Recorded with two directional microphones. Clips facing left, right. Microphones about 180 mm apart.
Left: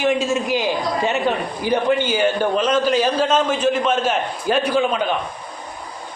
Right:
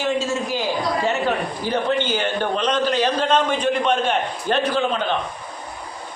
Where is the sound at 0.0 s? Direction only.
15° left (ahead or behind).